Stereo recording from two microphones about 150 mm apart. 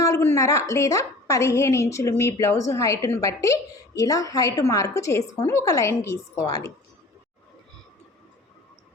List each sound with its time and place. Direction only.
0.0 s a woman's voice: 20° left (ahead or behind)